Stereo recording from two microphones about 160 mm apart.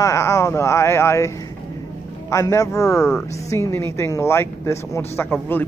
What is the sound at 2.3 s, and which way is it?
Speech, 20° left (ahead or behind).